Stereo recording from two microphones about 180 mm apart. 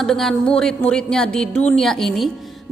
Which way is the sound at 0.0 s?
Centre (ahead or behind).